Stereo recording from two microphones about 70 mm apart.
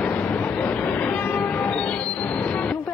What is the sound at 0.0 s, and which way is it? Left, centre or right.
Train, left.